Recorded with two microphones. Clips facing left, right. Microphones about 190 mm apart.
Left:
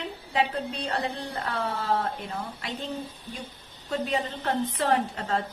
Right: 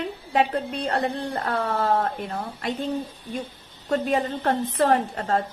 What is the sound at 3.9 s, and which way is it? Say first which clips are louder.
A woman's voice: right 5 dB; 50° right (ahead or behind).